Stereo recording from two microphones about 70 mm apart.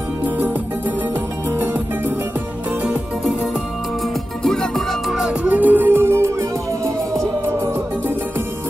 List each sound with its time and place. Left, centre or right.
1.6 s music: right
4.4 s music: centre
5.4 s music: right